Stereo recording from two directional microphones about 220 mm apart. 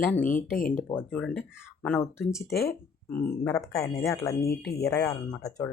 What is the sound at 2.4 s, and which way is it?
Speech, 45° left (ahead or behind).